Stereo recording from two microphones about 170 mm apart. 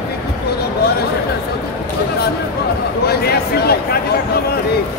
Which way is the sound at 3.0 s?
65° left (ahead or behind).